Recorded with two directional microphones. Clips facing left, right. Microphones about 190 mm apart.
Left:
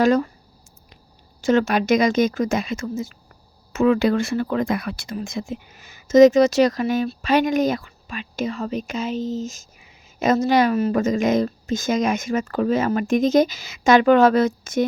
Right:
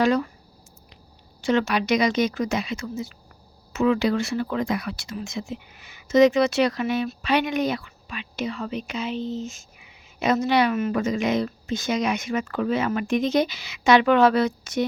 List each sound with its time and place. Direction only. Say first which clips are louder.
0.0 s speech: left 3 dB; 45° left (ahead or behind)
1.4 s speech: left 4 dB; 45° left (ahead or behind)